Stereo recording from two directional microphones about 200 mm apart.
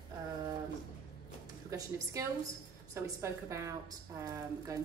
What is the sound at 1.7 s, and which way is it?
Speech, 15° right (ahead or behind).